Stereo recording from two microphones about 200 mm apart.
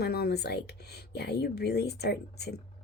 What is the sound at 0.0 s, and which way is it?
Speech, 50° left (ahead or behind).